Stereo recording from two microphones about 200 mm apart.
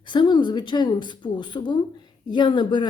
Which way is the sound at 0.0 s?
25° left (ahead or behind).